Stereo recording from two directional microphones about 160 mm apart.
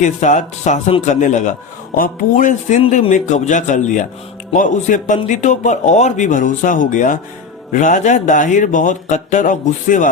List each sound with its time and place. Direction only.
0.0 s a man's voice: 50° left (ahead or behind)